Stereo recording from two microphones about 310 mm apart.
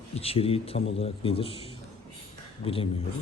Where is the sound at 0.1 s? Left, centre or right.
Centre.